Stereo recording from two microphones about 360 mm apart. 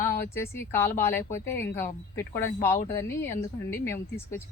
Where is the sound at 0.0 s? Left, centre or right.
Centre.